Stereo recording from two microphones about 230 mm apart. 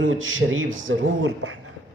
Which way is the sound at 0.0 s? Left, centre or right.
Right.